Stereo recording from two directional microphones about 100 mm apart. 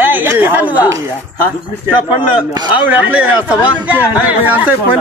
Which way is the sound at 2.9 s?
15° right (ahead or behind).